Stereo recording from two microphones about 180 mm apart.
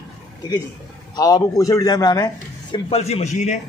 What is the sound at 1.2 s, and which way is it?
A man's voice, 20° left (ahead or behind).